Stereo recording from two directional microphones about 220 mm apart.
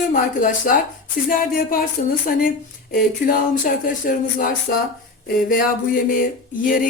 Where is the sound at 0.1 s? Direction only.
35° left (ahead or behind).